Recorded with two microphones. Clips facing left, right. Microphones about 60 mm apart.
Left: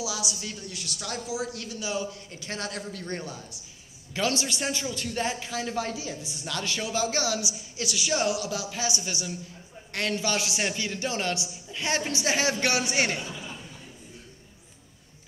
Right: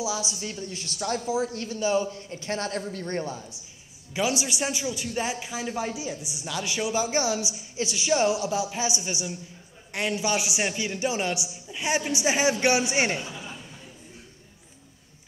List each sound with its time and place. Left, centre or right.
0.0 s speech: right
4.1 s a man's voice: centre